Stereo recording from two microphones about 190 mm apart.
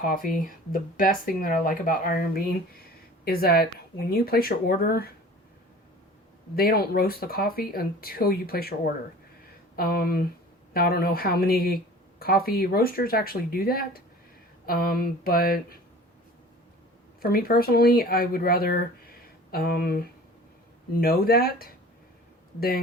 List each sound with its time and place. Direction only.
0.0 s speech: 50° left (ahead or behind)
6.6 s speech: 55° left (ahead or behind)
9.7 s speech: 50° left (ahead or behind)
17.2 s speech: 50° left (ahead or behind)